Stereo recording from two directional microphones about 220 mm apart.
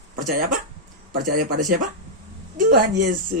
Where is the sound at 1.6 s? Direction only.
35° right (ahead or behind).